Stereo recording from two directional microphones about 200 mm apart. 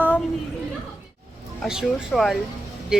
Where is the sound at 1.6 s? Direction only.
Centre (ahead or behind).